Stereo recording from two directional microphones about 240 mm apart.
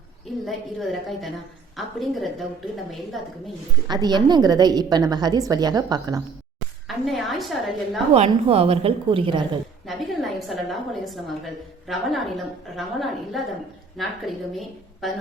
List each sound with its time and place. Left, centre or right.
0.4 s a woman's voice: centre
3.8 s a woman's voice: centre
6.8 s a woman's voice: centre
8.1 s a woman's voice: right
9.8 s a sound: centre
11.9 s a woman's voice: centre